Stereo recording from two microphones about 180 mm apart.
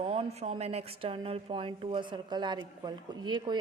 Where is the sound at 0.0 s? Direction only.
35° right (ahead or behind).